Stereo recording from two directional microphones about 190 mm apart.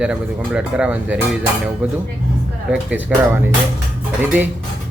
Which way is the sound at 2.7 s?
5° right (ahead or behind).